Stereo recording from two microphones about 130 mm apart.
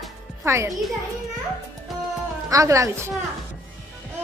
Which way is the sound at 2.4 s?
25° right (ahead or behind).